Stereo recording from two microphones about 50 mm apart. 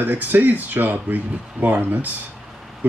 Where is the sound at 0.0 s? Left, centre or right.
Right.